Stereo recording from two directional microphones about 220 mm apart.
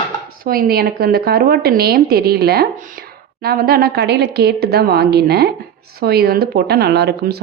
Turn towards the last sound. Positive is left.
turn(degrees=-45)  # may be behind; listen again after turning